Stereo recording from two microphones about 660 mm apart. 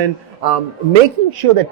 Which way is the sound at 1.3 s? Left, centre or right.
Right.